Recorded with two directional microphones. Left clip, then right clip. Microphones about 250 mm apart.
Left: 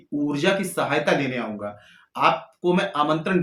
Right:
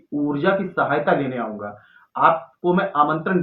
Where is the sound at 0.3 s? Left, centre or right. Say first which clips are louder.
Right 2 dB; left.